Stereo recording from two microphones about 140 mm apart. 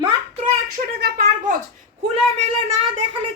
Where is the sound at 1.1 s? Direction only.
80° right.